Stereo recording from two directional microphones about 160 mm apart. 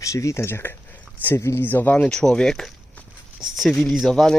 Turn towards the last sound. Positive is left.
turn(degrees=0)  # may be behind; listen again after turning